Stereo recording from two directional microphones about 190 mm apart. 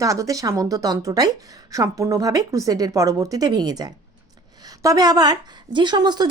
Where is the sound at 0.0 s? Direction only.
15° right (ahead or behind).